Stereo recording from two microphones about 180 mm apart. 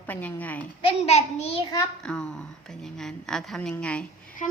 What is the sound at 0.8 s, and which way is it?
Speech, 35° left (ahead or behind).